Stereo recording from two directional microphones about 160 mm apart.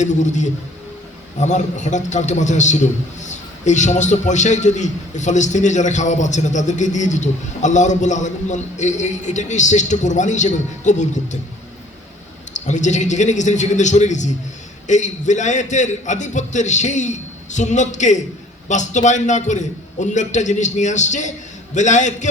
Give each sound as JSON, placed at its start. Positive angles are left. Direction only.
{"t": 0.0, "sound": "a man's voice", "side_deg": 50}
{"t": 12.5, "sound": "a man's voice", "side_deg": 50}